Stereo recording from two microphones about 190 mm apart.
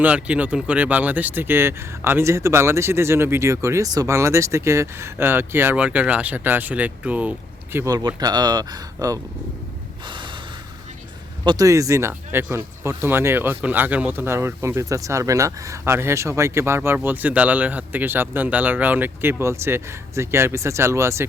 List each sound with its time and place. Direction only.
0.0 s speech: 10° right (ahead or behind)
10.1 s gasp: 25° right (ahead or behind)
11.4 s speech: 20° right (ahead or behind)